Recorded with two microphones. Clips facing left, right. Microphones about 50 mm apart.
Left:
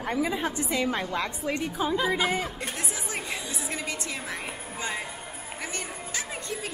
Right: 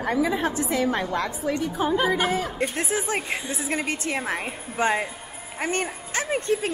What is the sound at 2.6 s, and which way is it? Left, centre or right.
A woman's voice, right.